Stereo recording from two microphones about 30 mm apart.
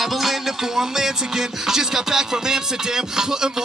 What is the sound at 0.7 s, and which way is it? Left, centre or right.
Music, centre.